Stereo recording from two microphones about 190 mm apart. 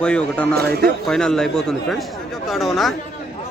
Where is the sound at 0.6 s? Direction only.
55° right (ahead or behind).